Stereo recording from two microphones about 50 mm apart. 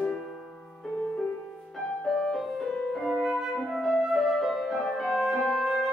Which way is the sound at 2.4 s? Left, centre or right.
Centre.